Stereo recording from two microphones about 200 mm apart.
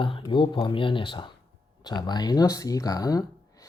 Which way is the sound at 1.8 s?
20° left (ahead or behind).